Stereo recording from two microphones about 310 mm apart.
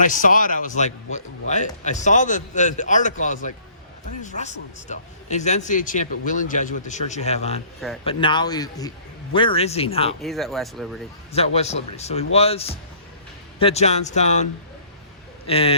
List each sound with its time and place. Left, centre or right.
0.0 s a man's voice: left
10.2 s speech: centre
11.3 s a man's voice: centre
15.4 s a man's voice: centre